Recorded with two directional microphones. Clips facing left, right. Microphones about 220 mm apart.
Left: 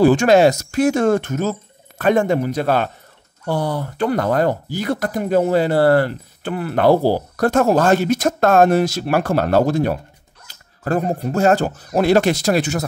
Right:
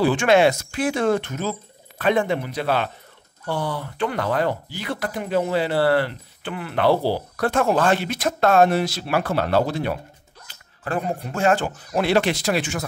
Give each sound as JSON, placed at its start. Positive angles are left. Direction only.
{"t": 0.0, "sound": "speech", "side_deg": 40}